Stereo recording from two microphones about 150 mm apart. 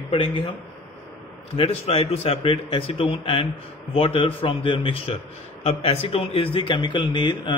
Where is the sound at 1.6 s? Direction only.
40° left (ahead or behind).